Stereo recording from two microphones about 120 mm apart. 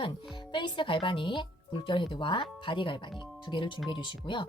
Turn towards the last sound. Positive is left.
turn(degrees=45)  # may be behind; listen again after turning